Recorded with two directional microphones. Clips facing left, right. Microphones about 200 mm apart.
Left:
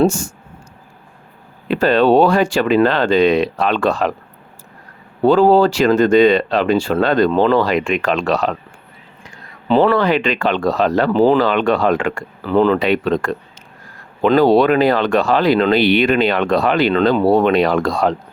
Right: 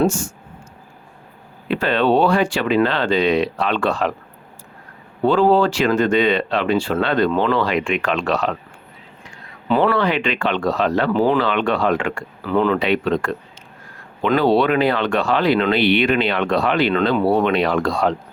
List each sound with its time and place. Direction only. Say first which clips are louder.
0.1 s speech: left 1 dB; 40° left (ahead or behind)
1.7 s speech: left 5 dB; 40° left (ahead or behind)
5.2 s speech: left 4 dB; 40° left (ahead or behind)
9.6 s speech: left 4 dB; 30° left (ahead or behind)
9.9 s speech: left 4 dB; 40° left (ahead or behind)